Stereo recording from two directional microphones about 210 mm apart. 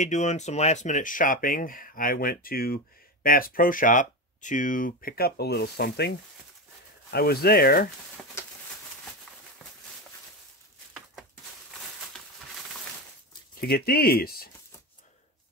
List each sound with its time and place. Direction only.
0.0 s speech: 35° left (ahead or behind)
13.6 s speech: 45° left (ahead or behind)